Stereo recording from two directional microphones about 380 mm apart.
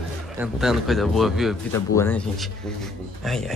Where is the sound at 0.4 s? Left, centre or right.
Centre.